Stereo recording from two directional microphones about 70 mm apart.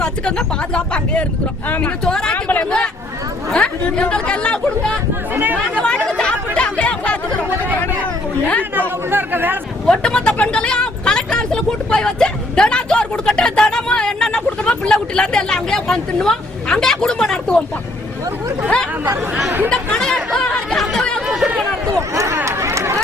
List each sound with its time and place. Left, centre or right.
0.0 s speech: centre
2.3 s speech: left
2.6 s speech: centre
5.3 s speech: right
5.7 s speech: centre
6.1 s chatter: centre
8.7 s speech: right
9.8 s speech: centre
19.7 s chatter: centre
22.1 s a sound: right
22.4 s run: right